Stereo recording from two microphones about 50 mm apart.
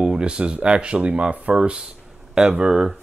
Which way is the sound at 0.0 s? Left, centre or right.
Centre.